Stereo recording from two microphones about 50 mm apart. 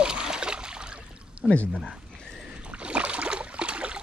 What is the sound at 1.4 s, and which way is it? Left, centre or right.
Speech, left.